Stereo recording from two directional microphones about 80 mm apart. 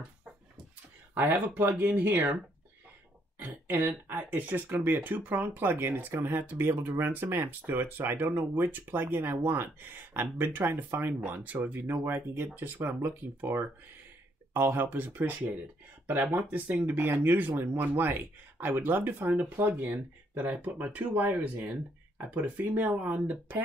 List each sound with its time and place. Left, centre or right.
1.1 s speech: right
3.3 s speech: right